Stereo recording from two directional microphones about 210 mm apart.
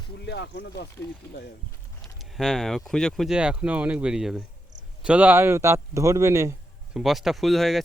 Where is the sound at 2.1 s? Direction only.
Centre (ahead or behind).